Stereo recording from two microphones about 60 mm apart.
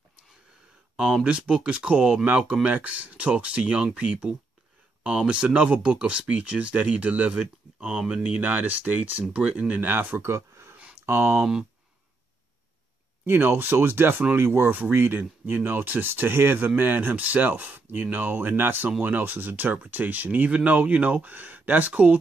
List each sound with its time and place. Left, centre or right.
1.2 s speech: centre; by 10.3 s right
10.3 s a sound: right
11.1 s speech: right
13.2 s speech: right